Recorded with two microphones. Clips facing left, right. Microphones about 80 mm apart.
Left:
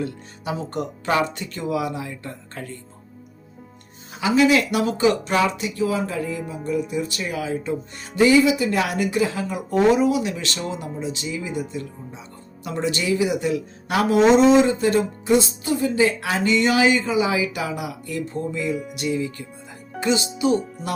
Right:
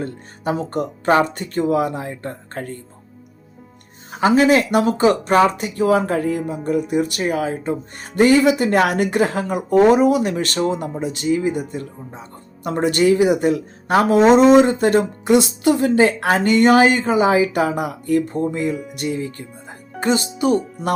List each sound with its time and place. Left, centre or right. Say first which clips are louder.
0.0 s speech: right 4 dB; right
4.1 s speech: right 3 dB; right